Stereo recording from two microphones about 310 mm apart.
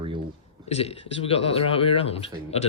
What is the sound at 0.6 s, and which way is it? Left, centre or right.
Speech, centre.